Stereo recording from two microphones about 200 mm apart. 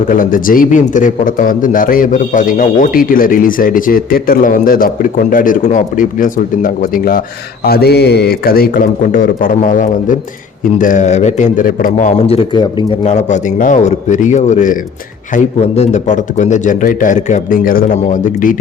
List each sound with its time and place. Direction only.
0.1 s a man's voice: 45° left (ahead or behind)